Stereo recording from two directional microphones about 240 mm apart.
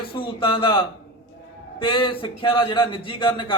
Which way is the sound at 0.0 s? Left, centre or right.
Left.